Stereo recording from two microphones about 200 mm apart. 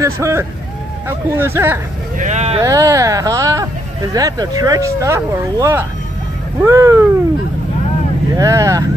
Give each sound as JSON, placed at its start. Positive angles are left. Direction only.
{"t": 0.0, "sound": "speech", "side_deg": -15}
{"t": 2.1, "sound": "speech", "side_deg": -35}
{"t": 2.6, "sound": "speech", "side_deg": -15}
{"t": 8.4, "sound": "speech", "side_deg": -15}